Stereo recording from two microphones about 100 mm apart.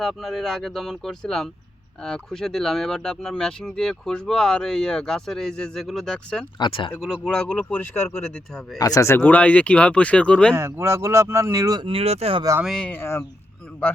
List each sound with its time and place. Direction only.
0.0 s speech: centre (ahead or behind)
6.6 s speech: 60° left (ahead or behind)
7.3 s speech: 10° left (ahead or behind)
8.8 s speech: 35° left (ahead or behind); by 10.5 s 10° left (ahead or behind)
10.5 s speech: 25° right (ahead or behind)
11.9 s speech: 80° right
12.6 s speech: 5° left (ahead or behind)
12.9 s speech: 25° left (ahead or behind)